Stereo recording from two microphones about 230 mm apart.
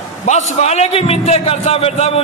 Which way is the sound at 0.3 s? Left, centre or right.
Left.